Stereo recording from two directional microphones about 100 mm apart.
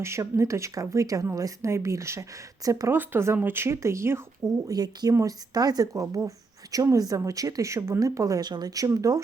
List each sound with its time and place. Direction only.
0.0 s speech: 30° right (ahead or behind)
4.7 s speech: 40° right (ahead or behind)